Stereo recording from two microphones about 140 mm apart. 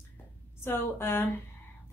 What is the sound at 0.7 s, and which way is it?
Speech, 15° left (ahead or behind).